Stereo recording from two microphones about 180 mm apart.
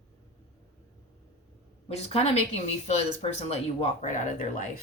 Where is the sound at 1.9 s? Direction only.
35° left (ahead or behind).